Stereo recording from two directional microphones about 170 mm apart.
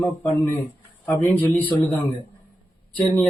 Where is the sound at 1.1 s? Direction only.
15° left (ahead or behind).